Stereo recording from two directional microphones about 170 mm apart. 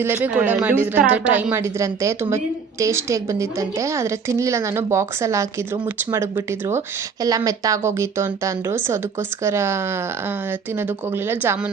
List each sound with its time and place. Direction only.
0.0 s a woman's voice: 10° right (ahead or behind)